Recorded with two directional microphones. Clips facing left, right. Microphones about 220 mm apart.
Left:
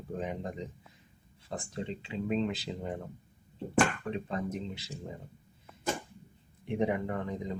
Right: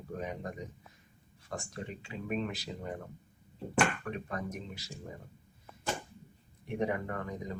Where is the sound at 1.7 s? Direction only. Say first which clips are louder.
Left 5 dB; 25° left (ahead or behind).